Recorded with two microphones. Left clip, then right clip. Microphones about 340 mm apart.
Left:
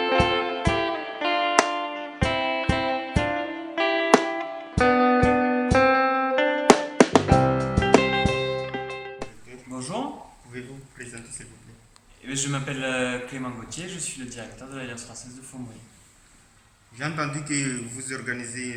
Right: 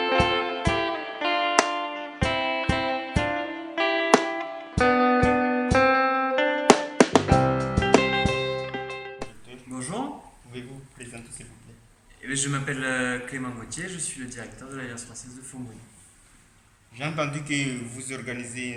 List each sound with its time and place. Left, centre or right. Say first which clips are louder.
0.0 s music: left 1 dB; centre
9.7 s a sound: left 2 dB; centre
12.2 s a man's voice: right 1 dB; centre
17.0 s a man's voice: even; centre